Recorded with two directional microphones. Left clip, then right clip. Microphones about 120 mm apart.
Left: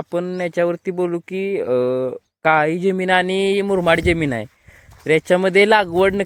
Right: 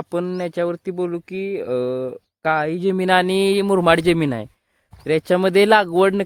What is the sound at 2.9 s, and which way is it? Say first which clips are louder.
A man's voice: even; 30° right (ahead or behind).